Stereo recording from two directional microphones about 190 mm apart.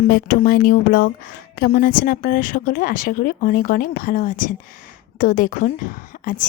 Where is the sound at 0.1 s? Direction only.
55° left (ahead or behind).